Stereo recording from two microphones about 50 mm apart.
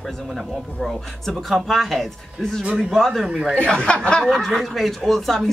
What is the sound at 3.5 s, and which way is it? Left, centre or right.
Speech, centre.